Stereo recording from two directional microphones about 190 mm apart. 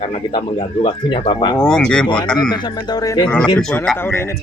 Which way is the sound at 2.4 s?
20° left (ahead or behind).